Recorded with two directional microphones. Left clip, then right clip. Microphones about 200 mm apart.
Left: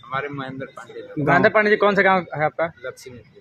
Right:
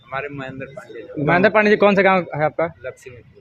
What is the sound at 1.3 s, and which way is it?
A man's voice, 40° right (ahead or behind).